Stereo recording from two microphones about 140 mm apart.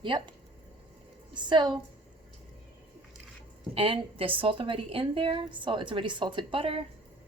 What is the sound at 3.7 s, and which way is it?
A woman's voice, 40° right (ahead or behind).